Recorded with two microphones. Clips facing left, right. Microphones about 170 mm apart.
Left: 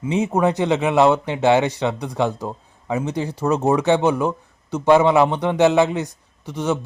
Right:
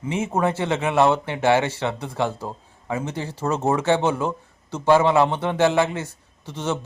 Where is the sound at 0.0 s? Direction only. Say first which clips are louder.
Left 4 dB; 15° left (ahead or behind).